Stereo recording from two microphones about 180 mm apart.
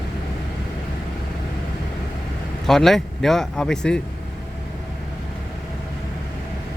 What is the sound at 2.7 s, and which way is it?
Speech, centre (ahead or behind).